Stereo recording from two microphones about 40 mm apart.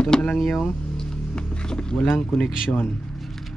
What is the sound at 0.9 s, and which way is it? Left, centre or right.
Music, centre.